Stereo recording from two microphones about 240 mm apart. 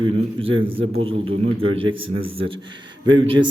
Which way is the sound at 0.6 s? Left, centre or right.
Right.